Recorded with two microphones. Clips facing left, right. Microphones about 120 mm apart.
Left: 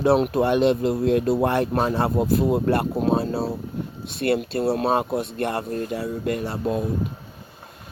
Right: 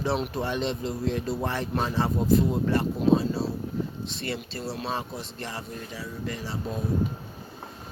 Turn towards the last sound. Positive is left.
turn(degrees=60)  # may be behind; listen again after turning